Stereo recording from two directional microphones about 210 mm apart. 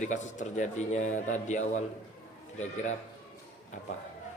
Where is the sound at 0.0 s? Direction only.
35° left (ahead or behind).